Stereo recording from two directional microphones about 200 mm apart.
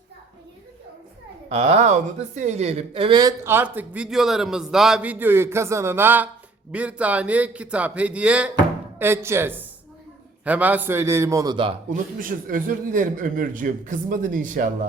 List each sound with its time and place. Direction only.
1.5 s a woman's voice: 35° right (ahead or behind)
11.9 s a man's voice: 45° right (ahead or behind)